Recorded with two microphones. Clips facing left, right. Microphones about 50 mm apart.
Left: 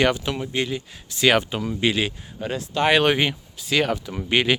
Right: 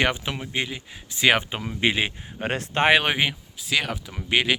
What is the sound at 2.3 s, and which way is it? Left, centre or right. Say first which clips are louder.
Speech: right 1 dB; right.